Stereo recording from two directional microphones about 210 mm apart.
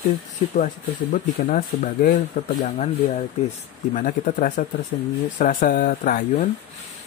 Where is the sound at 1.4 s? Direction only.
40° left (ahead or behind).